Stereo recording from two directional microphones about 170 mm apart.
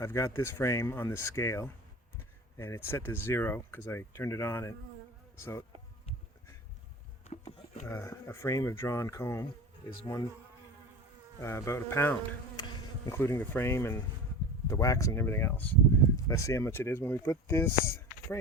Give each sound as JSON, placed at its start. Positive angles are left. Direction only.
{"t": 0.0, "sound": "speech", "side_deg": 15}
{"t": 7.9, "sound": "speech", "side_deg": 15}
{"t": 11.3, "sound": "speech", "side_deg": 15}
{"t": 12.5, "sound": "bee", "side_deg": 25}
{"t": 13.1, "sound": "speech", "side_deg": 15}